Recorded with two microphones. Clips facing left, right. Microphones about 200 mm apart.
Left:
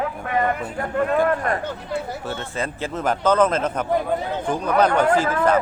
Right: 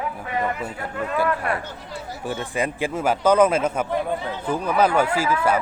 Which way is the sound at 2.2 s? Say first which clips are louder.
Right 2 dB; 15° right (ahead or behind).